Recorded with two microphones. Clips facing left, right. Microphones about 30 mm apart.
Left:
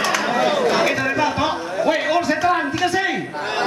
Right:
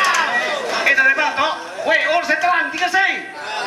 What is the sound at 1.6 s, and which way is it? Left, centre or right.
Music, centre.